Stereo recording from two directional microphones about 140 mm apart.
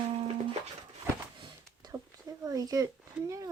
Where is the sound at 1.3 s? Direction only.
30° right (ahead or behind).